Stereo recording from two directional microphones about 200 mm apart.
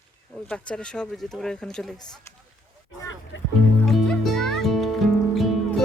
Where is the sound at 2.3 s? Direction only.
15° left (ahead or behind).